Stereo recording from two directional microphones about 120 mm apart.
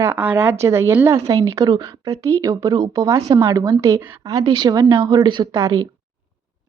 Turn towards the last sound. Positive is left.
turn(degrees=-30)  # may be behind; listen again after turning